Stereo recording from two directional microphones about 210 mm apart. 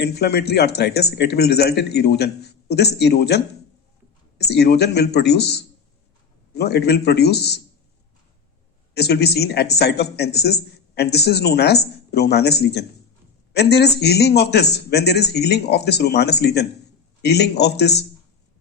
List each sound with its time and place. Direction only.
0.0 s speech: 50° left (ahead or behind)
9.0 s speech: 50° left (ahead or behind)